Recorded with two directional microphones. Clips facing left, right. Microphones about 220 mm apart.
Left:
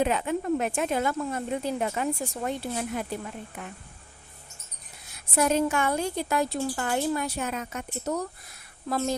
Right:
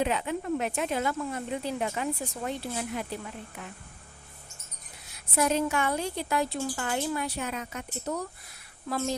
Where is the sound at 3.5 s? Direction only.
50° left (ahead or behind).